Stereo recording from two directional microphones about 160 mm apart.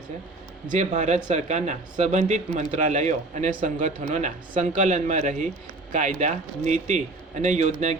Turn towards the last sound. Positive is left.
turn(degrees=-45)  # may be behind; listen again after turning